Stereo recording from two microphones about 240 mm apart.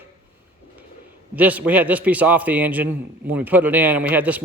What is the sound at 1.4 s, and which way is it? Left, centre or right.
A man's voice, centre.